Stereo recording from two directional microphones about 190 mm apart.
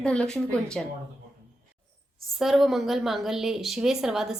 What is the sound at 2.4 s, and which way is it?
A woman's voice, centre (ahead or behind).